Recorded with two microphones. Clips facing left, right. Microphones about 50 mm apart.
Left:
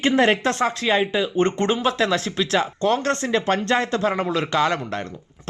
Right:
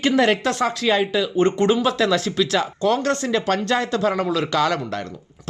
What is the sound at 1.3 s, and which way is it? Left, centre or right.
Speech, left.